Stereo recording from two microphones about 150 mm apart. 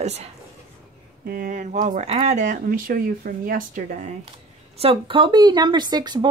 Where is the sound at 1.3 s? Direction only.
60° right (ahead or behind).